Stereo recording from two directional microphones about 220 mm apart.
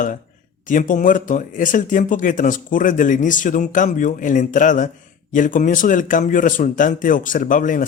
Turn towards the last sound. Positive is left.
turn(degrees=35)  # may be behind; listen again after turning